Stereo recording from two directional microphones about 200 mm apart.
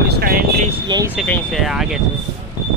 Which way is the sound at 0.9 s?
20° right (ahead or behind).